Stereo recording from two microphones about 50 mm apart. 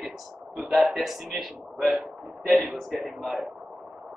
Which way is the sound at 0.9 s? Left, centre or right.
Centre.